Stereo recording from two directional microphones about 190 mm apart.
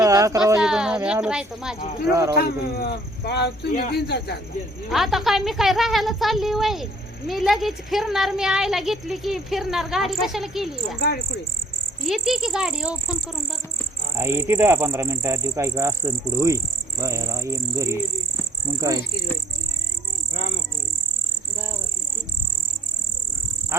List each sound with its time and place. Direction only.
0.0 s a sound: 20° right (ahead or behind)
0.6 s a sound: 5° right (ahead or behind)
1.8 s speech: 45° left (ahead or behind)
2.0 s speech: 15° right (ahead or behind)
2.3 s speech: 60° left (ahead or behind)
4.9 s speech: centre (ahead or behind)
12.0 s speech: centre (ahead or behind)
14.2 s speech: 15° right (ahead or behind)